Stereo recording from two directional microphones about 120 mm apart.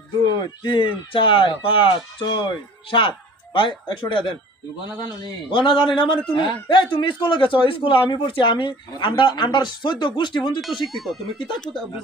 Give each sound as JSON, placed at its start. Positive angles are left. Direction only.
{"t": 0.2, "sound": "speech", "side_deg": 35}
{"t": 5.5, "sound": "speech", "side_deg": 40}
{"t": 10.9, "sound": "speech", "side_deg": 0}